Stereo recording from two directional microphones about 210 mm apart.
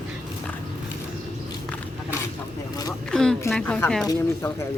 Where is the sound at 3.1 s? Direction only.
5° left (ahead or behind).